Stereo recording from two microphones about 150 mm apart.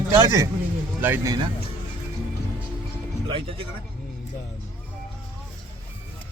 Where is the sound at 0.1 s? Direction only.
20° right (ahead or behind).